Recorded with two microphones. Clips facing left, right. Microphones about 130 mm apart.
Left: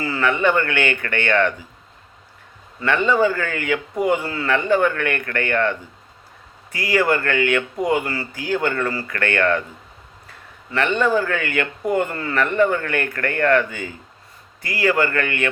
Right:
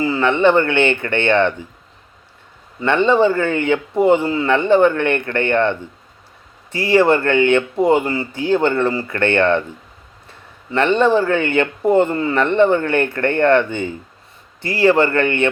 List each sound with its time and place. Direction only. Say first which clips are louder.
0.0 s speech: right 5 dB; 20° right (ahead or behind)
2.8 s speech: right 4 dB; 25° right (ahead or behind)
10.7 s speech: right 5 dB; 30° right (ahead or behind)